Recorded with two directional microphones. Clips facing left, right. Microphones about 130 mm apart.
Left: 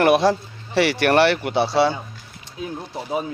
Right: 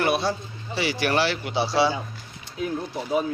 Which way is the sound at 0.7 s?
65° left (ahead or behind).